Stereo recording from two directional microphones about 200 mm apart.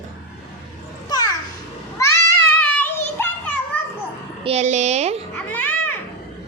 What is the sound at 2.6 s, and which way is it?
Children playing, 5° left (ahead or behind).